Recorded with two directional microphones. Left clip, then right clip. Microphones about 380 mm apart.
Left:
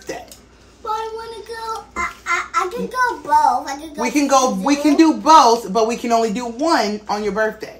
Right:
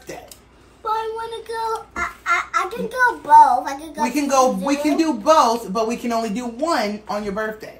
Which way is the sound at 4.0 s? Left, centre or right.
Centre.